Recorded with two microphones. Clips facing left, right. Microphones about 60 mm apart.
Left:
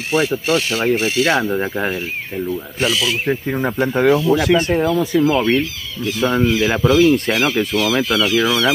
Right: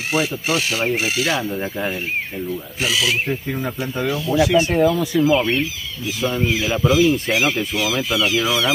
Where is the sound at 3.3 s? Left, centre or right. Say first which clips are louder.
Left 5 dB; left.